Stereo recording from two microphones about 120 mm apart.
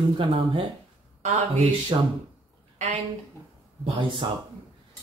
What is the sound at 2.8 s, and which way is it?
Speech, 75° right (ahead or behind).